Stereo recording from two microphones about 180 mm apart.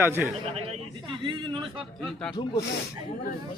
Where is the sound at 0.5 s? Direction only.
30° right (ahead or behind).